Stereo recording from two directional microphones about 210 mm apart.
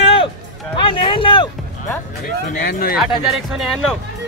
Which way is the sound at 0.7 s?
25° left (ahead or behind).